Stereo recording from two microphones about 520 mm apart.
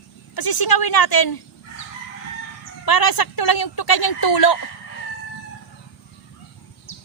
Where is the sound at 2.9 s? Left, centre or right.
Left.